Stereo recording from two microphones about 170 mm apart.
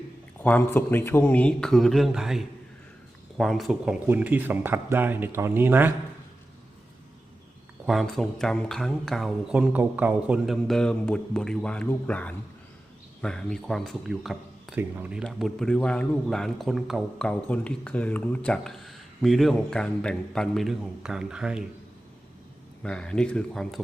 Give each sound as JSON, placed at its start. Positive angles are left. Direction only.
{"t": 0.3, "sound": "a man's voice", "side_deg": 10}
{"t": 7.9, "sound": "a man's voice", "side_deg": 0}
{"t": 14.8, "sound": "speech", "side_deg": -10}
{"t": 15.2, "sound": "a man's voice", "side_deg": 0}
{"t": 22.8, "sound": "a man's voice", "side_deg": 5}